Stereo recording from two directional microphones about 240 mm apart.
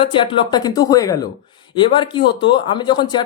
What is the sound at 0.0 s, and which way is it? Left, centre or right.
Speech, left.